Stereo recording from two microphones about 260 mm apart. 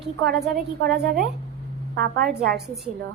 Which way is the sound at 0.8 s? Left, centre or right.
Right.